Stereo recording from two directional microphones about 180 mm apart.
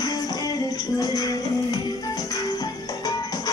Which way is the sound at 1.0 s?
20° left (ahead or behind).